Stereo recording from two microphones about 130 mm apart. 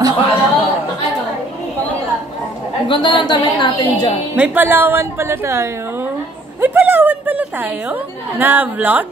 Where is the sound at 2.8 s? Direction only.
40° left (ahead or behind).